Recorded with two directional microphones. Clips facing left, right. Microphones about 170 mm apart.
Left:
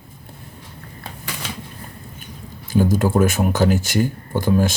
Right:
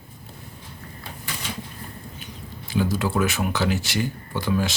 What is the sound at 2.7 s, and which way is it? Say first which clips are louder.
Speech: left 6 dB; 45° left (ahead or behind).